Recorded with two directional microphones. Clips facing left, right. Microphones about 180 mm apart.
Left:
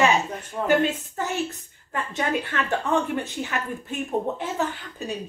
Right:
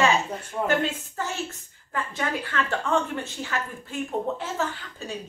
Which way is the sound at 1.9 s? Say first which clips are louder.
Left 3 dB; 20° left (ahead or behind).